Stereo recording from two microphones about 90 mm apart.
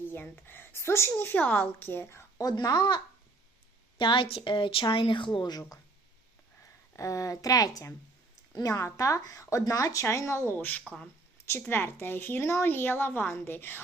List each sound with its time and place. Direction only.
0.1 s a woman's voice: 25° left (ahead or behind)
2.4 s speech: 45° left (ahead or behind)
6.9 s a woman's voice: 40° left (ahead or behind)